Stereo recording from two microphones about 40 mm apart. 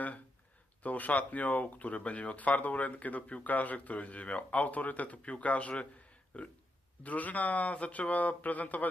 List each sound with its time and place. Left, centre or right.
0.8 s speech: left
6.3 s a sound: left
7.0 s speech: left